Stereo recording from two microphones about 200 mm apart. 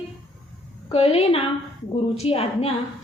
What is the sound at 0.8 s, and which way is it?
A woman's voice, 30° left (ahead or behind).